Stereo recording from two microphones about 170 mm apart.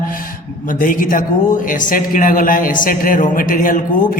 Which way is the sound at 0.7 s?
50° left (ahead or behind).